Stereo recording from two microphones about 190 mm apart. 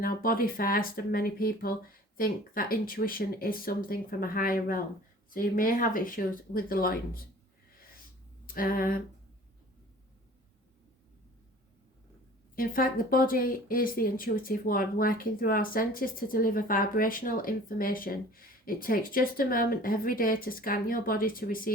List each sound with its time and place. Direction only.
0.0 s speech: 50° left (ahead or behind)
8.4 s speech: 50° left (ahead or behind)
12.5 s speech: 50° left (ahead or behind)